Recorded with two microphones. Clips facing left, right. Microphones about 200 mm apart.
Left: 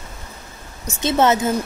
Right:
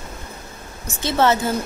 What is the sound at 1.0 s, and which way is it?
Speech, 20° left (ahead or behind).